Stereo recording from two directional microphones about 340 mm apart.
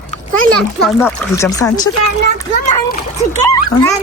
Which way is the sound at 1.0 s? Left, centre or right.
Centre.